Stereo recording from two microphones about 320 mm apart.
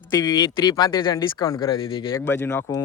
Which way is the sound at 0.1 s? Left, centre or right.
Centre.